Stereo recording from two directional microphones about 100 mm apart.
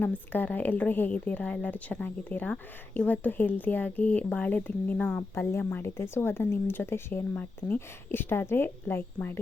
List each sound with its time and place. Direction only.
0.0 s speech: 15° left (ahead or behind)